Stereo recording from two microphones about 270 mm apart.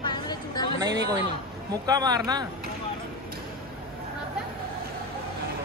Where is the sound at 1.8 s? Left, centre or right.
Centre.